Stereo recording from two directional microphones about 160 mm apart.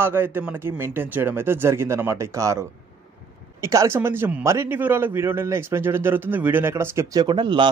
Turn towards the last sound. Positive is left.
turn(degrees=-30)  # may be behind; listen again after turning